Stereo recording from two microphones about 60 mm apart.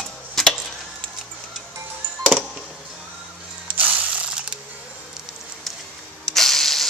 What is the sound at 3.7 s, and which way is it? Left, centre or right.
Ratchet, right.